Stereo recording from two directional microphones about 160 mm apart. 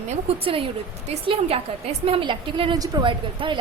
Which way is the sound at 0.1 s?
35° right (ahead or behind).